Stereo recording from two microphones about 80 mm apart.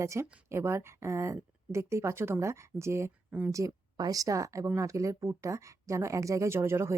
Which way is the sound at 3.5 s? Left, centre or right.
Right.